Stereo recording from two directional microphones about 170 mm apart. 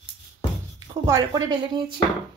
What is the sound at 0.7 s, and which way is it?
Speech, 20° right (ahead or behind).